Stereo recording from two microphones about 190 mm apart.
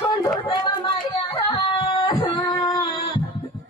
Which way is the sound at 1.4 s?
25° left (ahead or behind).